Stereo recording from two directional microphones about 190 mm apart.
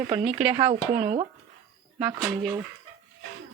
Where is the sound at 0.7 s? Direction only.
45° right (ahead or behind).